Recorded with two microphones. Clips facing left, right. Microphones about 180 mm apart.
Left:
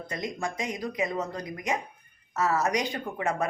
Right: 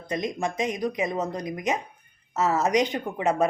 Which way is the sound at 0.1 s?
20° right (ahead or behind).